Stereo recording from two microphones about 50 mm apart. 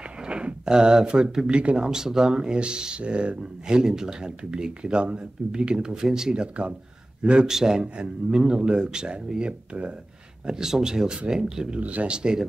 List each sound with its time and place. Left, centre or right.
0.3 s speech: centre
1.9 s speech: centre
7.3 s speech: centre
10.4 s speech: centre
11.8 s speech: right